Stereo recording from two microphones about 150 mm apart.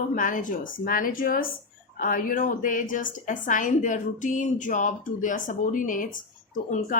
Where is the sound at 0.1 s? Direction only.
60° left (ahead or behind).